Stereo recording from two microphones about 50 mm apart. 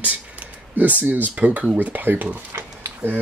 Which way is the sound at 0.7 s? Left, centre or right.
Right.